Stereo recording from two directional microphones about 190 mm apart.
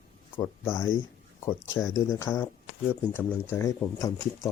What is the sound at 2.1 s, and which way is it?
Speech, 15° left (ahead or behind).